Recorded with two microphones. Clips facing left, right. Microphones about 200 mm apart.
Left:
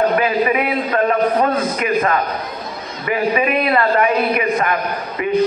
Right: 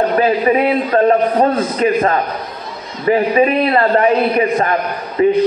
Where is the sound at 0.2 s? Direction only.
35° right (ahead or behind).